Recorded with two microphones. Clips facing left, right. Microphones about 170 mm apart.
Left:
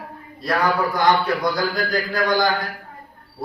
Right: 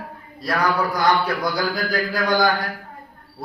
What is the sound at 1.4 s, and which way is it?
A man's voice, centre (ahead or behind).